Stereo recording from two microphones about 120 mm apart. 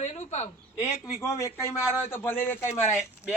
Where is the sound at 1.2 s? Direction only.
25° left (ahead or behind).